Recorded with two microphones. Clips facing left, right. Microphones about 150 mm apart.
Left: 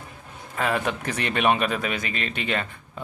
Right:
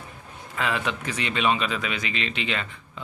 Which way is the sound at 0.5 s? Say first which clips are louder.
Left 2 dB; 45° left (ahead or behind).